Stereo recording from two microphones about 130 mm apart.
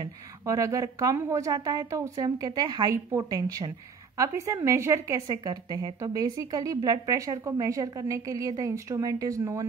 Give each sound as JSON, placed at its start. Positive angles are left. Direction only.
{"t": 0.0, "sound": "a woman's voice", "side_deg": -25}